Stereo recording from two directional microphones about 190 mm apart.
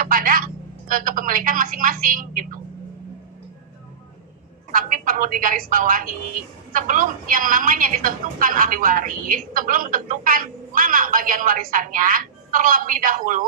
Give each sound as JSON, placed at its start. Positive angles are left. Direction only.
{"t": 0.0, "sound": "a woman's voice", "side_deg": -50}
{"t": 4.7, "sound": "a woman's voice", "side_deg": -45}